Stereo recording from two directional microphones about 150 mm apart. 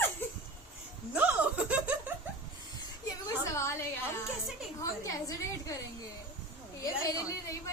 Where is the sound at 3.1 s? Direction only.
20° left (ahead or behind).